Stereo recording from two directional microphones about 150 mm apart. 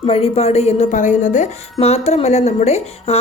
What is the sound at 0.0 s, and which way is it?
Speech, 40° left (ahead or behind).